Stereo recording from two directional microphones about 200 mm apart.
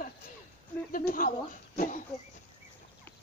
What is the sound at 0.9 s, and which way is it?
Speech, 45° left (ahead or behind).